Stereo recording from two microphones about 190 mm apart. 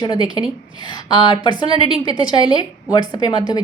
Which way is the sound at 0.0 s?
20° left (ahead or behind).